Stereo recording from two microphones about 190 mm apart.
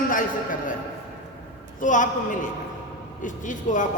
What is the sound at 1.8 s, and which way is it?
A man's voice, 40° left (ahead or behind).